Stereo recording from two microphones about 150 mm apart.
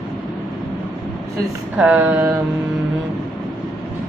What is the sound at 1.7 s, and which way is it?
Speech, 10° right (ahead or behind).